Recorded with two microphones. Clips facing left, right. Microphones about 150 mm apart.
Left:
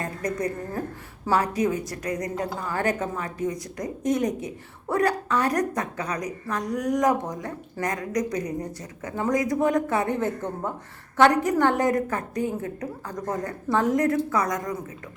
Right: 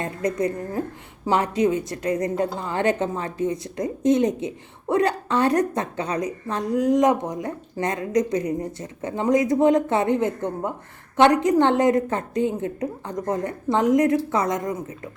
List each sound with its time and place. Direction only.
0.0 s a woman's voice: 20° right (ahead or behind)